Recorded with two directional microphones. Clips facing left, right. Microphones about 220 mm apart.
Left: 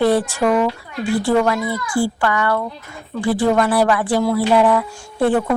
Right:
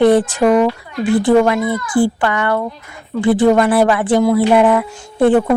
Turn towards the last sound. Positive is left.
turn(degrees=-20)  # may be behind; listen again after turning